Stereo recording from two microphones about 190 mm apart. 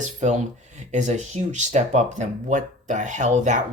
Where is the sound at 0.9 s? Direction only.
40° right (ahead or behind).